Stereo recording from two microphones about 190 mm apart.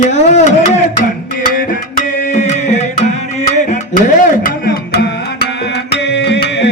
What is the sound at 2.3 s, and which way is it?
Music, 35° left (ahead or behind).